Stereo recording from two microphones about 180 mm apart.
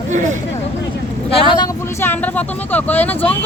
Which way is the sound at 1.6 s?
15° left (ahead or behind).